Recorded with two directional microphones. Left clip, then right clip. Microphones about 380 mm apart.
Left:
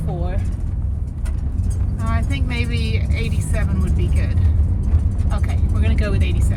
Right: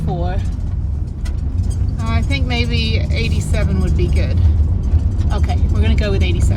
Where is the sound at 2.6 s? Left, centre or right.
Centre.